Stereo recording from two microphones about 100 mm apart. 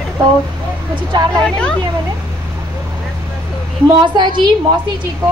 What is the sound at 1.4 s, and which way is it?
Speech, 10° left (ahead or behind).